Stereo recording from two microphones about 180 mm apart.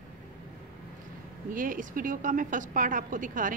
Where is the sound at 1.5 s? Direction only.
50° right (ahead or behind).